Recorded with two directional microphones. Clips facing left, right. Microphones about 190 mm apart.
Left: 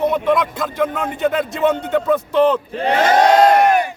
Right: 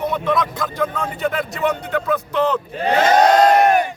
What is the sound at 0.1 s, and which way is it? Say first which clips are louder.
Speech: left 3 dB; 25° left (ahead or behind).